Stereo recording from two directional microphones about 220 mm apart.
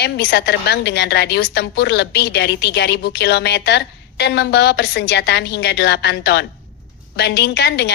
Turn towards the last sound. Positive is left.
turn(degrees=50)  # may be behind; listen again after turning